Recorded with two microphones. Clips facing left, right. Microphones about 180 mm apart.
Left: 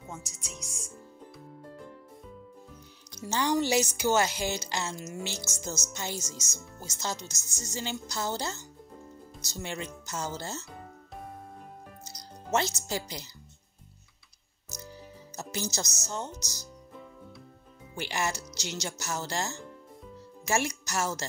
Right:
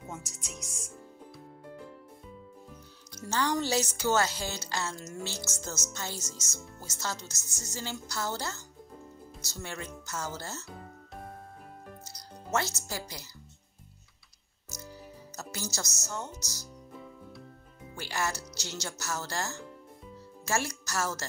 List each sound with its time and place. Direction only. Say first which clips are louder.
0.1 s speech: left 1 dB; centre (ahead or behind)
3.2 s speech: left 2 dB; 15° left (ahead or behind)
12.0 s music: left 1 dB; 20° left (ahead or behind)
15.3 s speech: left 4 dB; 20° left (ahead or behind)
17.9 s speech: left 2 dB; 20° left (ahead or behind)